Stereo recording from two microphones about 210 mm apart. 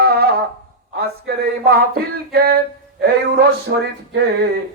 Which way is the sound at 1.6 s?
45° right (ahead or behind).